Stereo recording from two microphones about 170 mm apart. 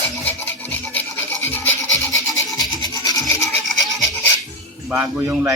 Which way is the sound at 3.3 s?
15° left (ahead or behind).